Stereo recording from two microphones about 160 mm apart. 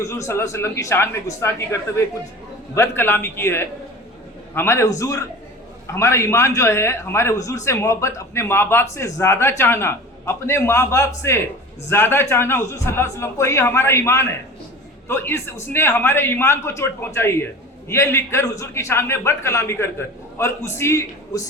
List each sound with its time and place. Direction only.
0.0 s a man's voice: 20° left (ahead or behind)